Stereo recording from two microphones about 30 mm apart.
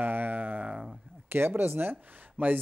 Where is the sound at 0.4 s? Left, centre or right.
Right.